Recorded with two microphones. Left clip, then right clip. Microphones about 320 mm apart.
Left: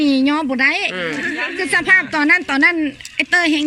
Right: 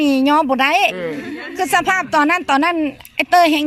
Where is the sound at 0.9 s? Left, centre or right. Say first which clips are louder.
Left 4 dB; right.